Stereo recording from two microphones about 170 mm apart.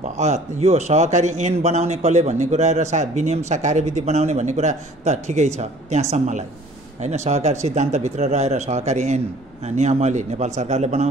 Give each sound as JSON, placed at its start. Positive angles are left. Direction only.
{"t": 0.0, "sound": "speech", "side_deg": -40}